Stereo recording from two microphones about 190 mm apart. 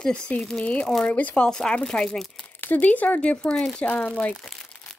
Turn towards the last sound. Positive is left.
turn(degrees=5)  # may be behind; listen again after turning